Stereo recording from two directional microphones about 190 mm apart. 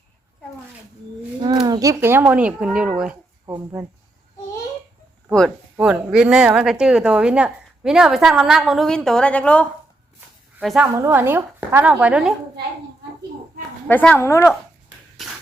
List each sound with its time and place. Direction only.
1.6 s a child's voice: 20° right (ahead or behind)
3.4 s speech: 15° right (ahead or behind)
5.7 s speech: 5° right (ahead or behind)
10.8 s a child's voice: 15° right (ahead or behind)
13.8 s speech: 10° left (ahead or behind)